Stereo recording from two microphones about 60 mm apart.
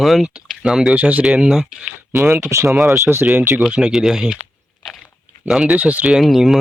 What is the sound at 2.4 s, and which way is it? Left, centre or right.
Speech, right.